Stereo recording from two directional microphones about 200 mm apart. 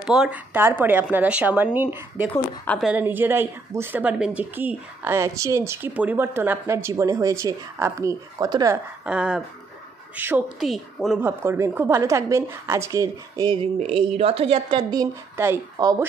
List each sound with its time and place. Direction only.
0.0 s a woman's voice: 5° right (ahead or behind)
9.0 s a woman's voice: 5° right (ahead or behind)